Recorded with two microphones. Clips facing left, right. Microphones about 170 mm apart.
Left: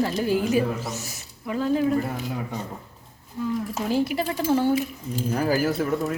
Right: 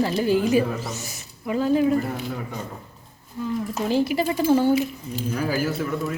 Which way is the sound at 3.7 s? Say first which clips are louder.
Right 4 dB; centre (ahead or behind).